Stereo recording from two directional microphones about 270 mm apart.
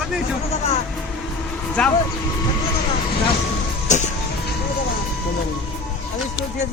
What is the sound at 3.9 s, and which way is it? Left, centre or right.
Speech, left.